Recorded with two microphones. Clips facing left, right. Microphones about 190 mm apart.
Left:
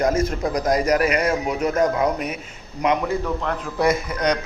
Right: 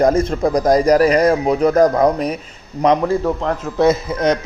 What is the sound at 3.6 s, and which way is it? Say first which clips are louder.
Speech: right 6 dB; 25° right (ahead or behind).